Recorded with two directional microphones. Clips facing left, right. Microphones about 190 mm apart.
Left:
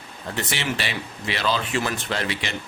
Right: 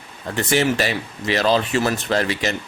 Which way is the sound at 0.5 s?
45° right (ahead or behind).